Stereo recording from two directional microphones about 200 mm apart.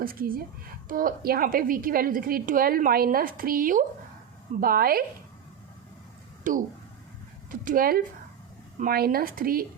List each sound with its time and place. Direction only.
0.0 s a woman's voice: 45° right (ahead or behind)
6.5 s a woman's voice: 40° right (ahead or behind)